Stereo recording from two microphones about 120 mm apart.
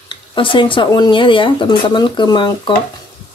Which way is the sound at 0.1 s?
45° left (ahead or behind).